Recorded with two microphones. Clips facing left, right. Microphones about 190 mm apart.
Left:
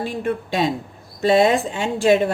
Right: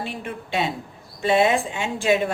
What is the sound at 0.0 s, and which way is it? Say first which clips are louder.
Speech: left 7 dB; 40° left (ahead or behind).